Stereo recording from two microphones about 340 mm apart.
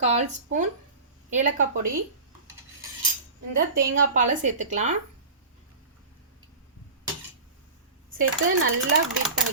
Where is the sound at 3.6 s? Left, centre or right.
Right.